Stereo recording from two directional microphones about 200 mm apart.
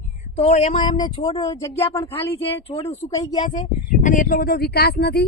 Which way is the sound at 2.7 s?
30° left (ahead or behind).